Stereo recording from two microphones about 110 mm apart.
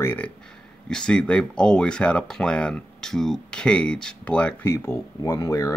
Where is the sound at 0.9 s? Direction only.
5° left (ahead or behind).